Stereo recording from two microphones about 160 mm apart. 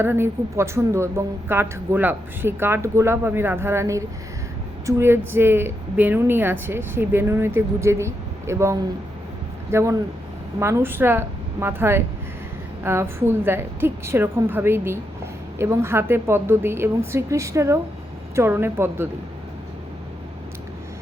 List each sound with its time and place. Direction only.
0.0 s a woman's voice: 15° right (ahead or behind)